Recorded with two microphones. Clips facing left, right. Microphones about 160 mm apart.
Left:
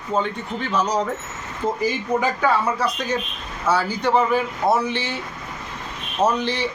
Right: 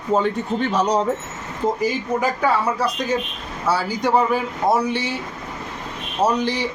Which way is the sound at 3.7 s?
15° right (ahead or behind).